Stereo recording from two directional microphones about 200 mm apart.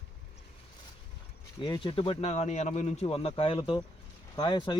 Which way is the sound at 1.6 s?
25° left (ahead or behind).